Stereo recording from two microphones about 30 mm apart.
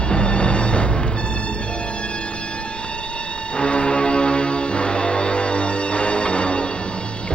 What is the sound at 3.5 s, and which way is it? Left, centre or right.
Music, left.